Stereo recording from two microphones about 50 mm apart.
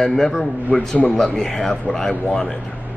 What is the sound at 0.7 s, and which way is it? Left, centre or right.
Speech, left.